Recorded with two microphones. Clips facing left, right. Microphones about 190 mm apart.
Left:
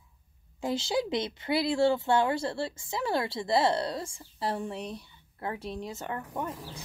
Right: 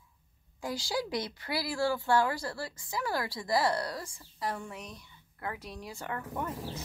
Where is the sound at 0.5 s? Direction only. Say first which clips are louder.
Left 5 dB; 25° left (ahead or behind).